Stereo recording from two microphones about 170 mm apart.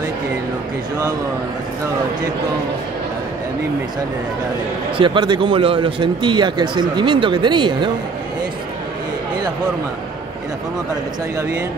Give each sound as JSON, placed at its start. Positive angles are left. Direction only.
{"t": 4.9, "sound": "speech", "side_deg": -30}